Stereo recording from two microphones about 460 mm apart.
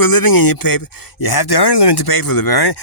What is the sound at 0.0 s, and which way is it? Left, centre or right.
Speech, left.